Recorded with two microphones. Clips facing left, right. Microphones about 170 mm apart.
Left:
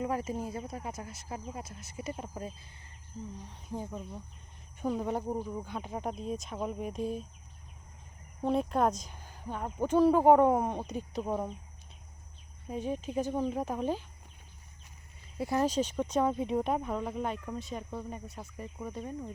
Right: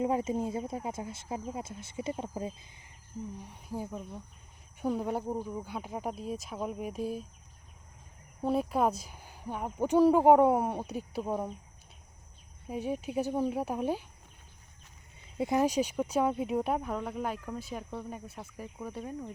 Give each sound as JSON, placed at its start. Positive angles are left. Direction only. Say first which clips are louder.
{"t": 0.0, "sound": "speech", "louder": "right 4 dB", "side_deg": -25}
{"t": 8.4, "sound": "speech", "louder": "even", "side_deg": -5}
{"t": 12.6, "sound": "speech", "louder": "right 1 dB", "side_deg": -10}
{"t": 15.4, "sound": "speech", "louder": "right 2 dB", "side_deg": -20}